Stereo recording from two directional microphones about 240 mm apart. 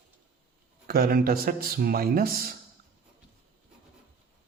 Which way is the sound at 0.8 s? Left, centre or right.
Right.